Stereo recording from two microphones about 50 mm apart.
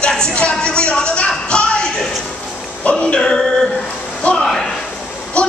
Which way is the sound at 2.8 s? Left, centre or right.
Left.